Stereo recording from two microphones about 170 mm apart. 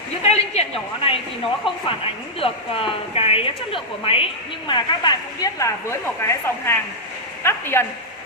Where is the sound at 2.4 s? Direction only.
35° left (ahead or behind).